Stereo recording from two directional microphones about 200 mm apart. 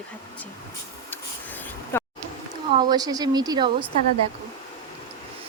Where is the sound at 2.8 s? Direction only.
20° right (ahead or behind).